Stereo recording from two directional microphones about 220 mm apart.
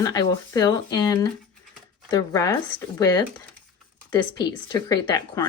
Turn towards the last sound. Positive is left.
turn(degrees=20)  # may be behind; listen again after turning